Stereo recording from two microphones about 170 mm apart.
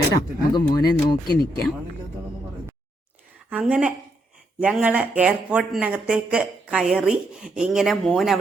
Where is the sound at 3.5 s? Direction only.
10° right (ahead or behind).